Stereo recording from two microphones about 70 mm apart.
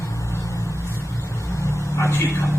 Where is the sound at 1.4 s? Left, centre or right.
Left.